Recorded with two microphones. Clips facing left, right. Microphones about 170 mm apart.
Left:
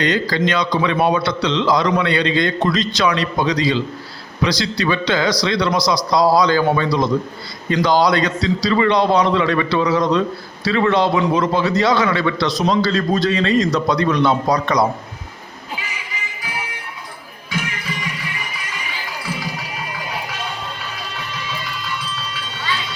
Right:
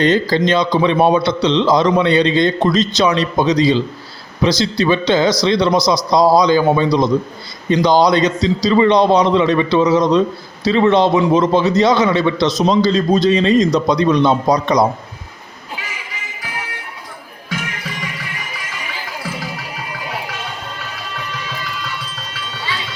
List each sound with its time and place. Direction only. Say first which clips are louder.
0.0 s a man's voice: right 4 dB; 30° right (ahead or behind)